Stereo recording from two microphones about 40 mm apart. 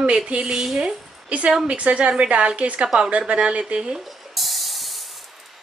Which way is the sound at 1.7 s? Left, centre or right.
Right.